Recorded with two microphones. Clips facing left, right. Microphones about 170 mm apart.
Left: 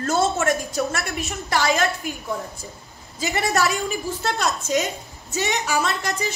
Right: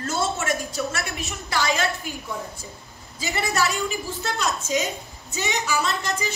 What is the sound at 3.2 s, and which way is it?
A woman's voice, 45° left (ahead or behind).